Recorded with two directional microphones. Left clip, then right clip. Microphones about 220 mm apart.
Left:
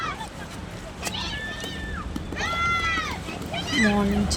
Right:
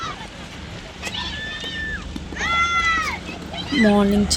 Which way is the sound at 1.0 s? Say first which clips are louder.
Right 3 dB; 50° left (ahead or behind).